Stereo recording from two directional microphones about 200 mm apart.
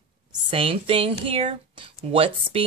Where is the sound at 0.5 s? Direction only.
25° right (ahead or behind).